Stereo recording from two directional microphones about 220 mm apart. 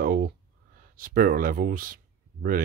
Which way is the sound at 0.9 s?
40° right (ahead or behind).